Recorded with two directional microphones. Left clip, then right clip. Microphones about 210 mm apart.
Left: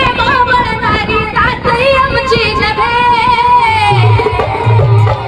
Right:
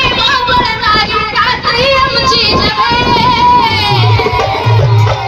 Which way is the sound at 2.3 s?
15° left (ahead or behind).